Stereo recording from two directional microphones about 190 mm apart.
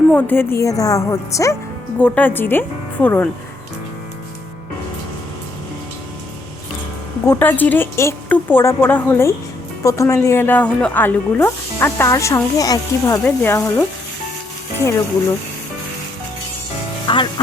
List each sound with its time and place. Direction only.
0.1 s speech: 10° left (ahead or behind)
7.3 s speech: 10° left (ahead or behind)
17.1 s speech: 25° left (ahead or behind)